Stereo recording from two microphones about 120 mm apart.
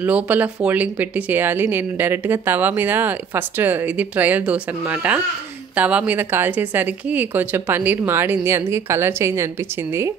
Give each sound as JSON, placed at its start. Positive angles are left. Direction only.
{"t": 0.0, "sound": "speech", "side_deg": -15}